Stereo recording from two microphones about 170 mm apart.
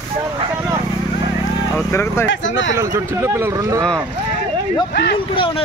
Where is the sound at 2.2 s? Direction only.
90° left.